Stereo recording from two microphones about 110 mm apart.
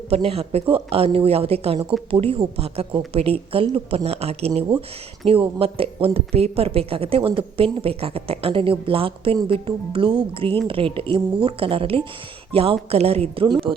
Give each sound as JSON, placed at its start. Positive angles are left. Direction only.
{"t": 0.1, "sound": "speech", "side_deg": -65}